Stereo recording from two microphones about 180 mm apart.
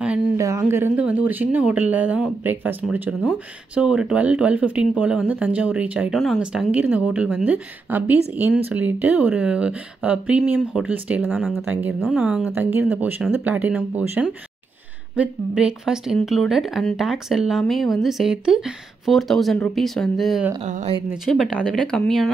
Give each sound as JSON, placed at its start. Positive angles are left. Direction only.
{"t": 0.0, "sound": "speech", "side_deg": -10}
{"t": 20.6, "sound": "speech", "side_deg": -40}
{"t": 21.1, "sound": "speech", "side_deg": 0}